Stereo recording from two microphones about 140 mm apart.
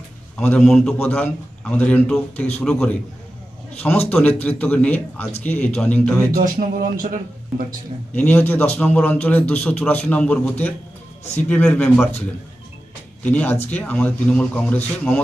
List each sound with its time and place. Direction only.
0.3 s a man's voice: 5° left (ahead or behind)
4.1 s a man's voice: 10° left (ahead or behind)
6.3 s music: 85° right
8.1 s a man's voice: 10° left (ahead or behind)
13.2 s a man's voice: 10° left (ahead or behind)